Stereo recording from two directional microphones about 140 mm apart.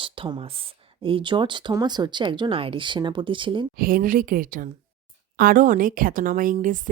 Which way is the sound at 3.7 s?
90° right.